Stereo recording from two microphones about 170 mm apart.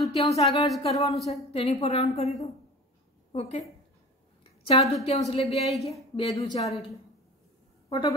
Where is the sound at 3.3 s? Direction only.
40° left (ahead or behind).